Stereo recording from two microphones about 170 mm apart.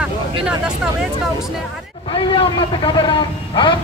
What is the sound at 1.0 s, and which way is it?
Speech, centre (ahead or behind).